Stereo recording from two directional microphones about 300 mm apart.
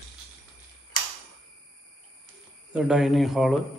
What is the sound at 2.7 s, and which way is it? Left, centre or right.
Speech, centre.